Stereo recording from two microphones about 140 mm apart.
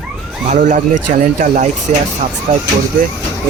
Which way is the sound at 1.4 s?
70° right (ahead or behind).